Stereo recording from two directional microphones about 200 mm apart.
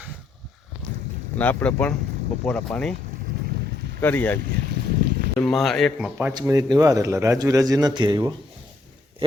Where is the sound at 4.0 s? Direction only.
10° left (ahead or behind).